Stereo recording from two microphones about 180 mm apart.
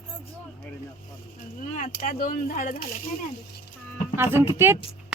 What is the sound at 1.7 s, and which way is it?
Speech, 40° left (ahead or behind).